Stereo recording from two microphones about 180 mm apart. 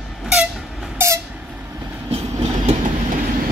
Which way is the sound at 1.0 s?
15° right (ahead or behind).